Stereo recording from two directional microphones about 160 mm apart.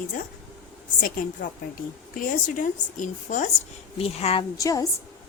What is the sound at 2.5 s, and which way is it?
Speech, 55° left (ahead or behind).